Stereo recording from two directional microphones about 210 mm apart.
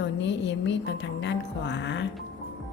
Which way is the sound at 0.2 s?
60° left (ahead or behind).